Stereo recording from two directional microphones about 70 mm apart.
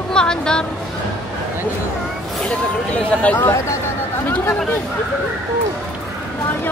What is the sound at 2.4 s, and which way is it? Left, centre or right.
Speech, centre.